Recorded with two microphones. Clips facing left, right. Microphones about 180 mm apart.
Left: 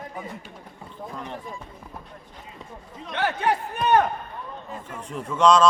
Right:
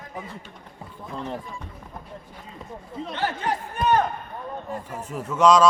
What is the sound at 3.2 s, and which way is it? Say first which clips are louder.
Speech: left 4 dB; 65° left (ahead or behind).